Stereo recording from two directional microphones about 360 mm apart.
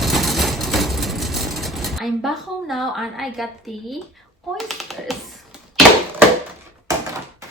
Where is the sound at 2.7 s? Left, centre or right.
Centre.